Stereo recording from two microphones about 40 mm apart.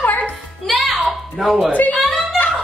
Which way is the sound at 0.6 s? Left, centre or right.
Centre.